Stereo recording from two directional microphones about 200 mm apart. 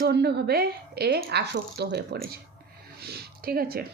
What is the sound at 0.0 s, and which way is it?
A woman's voice, 55° right (ahead or behind).